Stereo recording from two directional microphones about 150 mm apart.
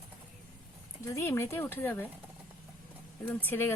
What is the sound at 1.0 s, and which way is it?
Speech, 20° left (ahead or behind).